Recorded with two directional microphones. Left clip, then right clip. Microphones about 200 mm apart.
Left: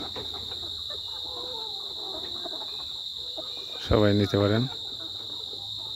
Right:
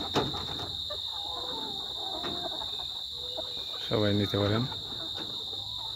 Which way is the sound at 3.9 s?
35° left (ahead or behind).